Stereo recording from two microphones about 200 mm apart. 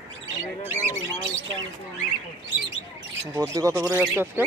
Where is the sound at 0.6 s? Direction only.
10° right (ahead or behind).